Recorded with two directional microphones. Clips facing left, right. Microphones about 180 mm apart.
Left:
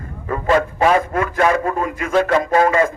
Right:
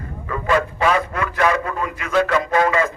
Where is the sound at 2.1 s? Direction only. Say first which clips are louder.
Left 2 dB; 35° left (ahead or behind).